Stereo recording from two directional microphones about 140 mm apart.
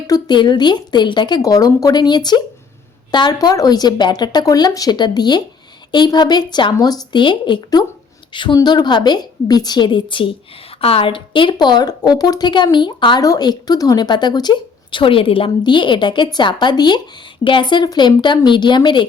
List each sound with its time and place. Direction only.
0.1 s a woman's voice: 35° left (ahead or behind)